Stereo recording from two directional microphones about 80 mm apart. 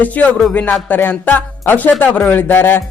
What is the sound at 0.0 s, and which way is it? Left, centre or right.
Speech, centre.